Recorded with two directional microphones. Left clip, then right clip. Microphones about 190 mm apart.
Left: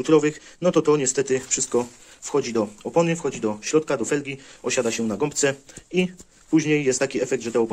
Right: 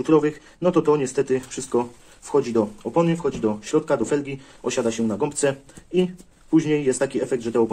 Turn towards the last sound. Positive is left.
turn(degrees=25)  # may be behind; listen again after turning